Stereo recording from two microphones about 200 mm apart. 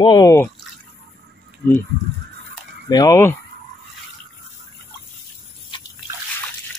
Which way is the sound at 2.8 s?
20° left (ahead or behind).